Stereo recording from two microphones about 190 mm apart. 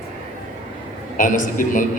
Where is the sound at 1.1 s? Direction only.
40° left (ahead or behind).